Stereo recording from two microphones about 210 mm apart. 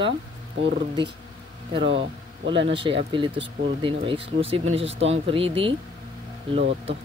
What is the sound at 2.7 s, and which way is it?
Speech, 25° right (ahead or behind).